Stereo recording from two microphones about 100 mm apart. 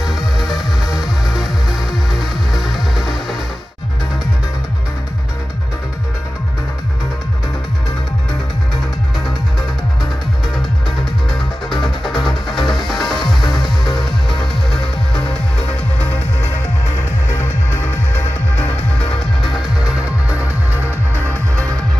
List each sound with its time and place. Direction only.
0.0 s music: 5° right (ahead or behind)
11.3 s music: centre (ahead or behind)
18.1 s music: 15° left (ahead or behind)
19.5 s music: 10° right (ahead or behind)